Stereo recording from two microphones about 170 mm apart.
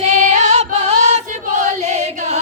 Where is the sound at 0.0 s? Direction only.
40° right (ahead or behind).